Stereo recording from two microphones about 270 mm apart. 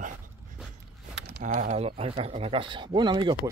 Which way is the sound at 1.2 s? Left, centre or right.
Right.